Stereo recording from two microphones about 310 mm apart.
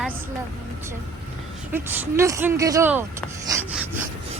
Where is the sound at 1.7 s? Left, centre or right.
Centre.